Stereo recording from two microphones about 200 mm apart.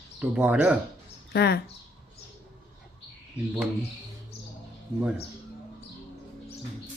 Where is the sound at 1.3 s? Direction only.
55° left (ahead or behind).